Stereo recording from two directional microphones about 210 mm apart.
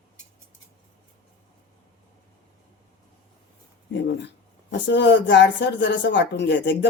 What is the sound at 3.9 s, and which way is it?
A woman's voice, 55° left (ahead or behind).